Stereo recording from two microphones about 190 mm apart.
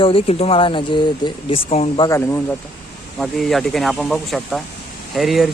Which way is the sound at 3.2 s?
Centre (ahead or behind).